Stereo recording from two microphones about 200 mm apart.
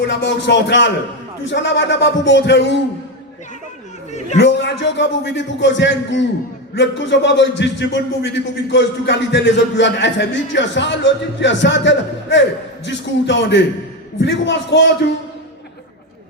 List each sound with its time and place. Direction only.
0.0 s a man's voice: 60° left (ahead or behind)
4.4 s a man's voice: 60° left (ahead or behind)